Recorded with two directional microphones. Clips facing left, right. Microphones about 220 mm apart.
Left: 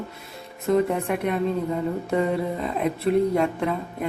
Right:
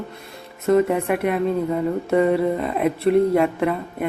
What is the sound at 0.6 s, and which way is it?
Speech, centre (ahead or behind).